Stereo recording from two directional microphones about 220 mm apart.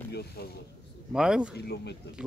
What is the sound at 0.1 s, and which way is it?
Speech, 50° left (ahead or behind).